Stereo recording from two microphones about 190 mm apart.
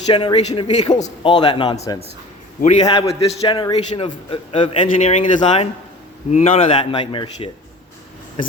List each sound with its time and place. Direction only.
0.1 s a man's voice: 25° left (ahead or behind)
2.6 s a man's voice: 35° left (ahead or behind)
4.8 s a man's voice: 40° left (ahead or behind)